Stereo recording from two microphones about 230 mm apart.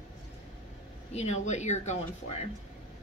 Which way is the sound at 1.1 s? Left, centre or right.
Left.